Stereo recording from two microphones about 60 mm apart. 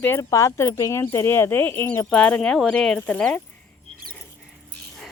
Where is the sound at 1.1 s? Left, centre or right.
Left.